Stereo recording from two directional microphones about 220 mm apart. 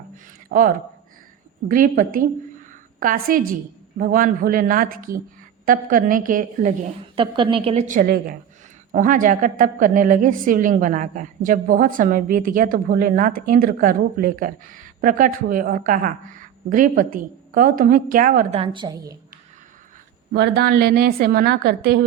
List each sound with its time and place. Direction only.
0.5 s a woman's voice: 45° right (ahead or behind)
18.6 s a woman's voice: 20° right (ahead or behind)
20.3 s a woman's voice: 45° right (ahead or behind)